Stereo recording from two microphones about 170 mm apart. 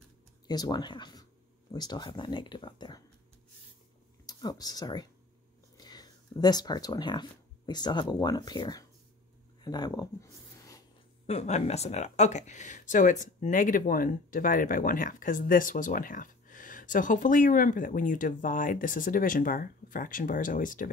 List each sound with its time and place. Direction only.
0.5 s speech: 25° left (ahead or behind)
4.3 s speech: 25° left (ahead or behind)
11.2 s speech: 40° left (ahead or behind)